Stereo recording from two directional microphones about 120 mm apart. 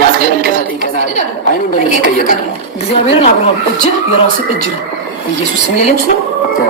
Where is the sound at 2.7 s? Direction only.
55° left (ahead or behind).